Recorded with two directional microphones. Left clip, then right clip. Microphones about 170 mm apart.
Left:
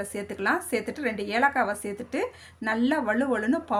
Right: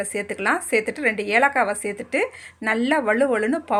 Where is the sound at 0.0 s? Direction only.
25° right (ahead or behind).